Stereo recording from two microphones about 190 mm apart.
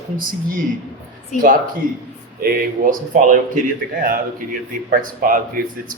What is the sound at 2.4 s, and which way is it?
Speech, 50° right (ahead or behind).